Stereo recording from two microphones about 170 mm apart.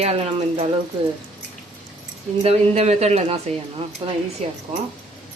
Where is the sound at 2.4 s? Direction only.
40° right (ahead or behind).